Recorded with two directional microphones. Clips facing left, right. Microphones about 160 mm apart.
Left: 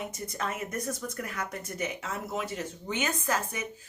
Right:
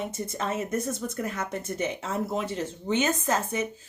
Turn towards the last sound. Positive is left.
turn(degrees=-25)  # may be behind; listen again after turning